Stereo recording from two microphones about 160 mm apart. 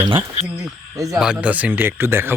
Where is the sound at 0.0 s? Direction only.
30° right (ahead or behind).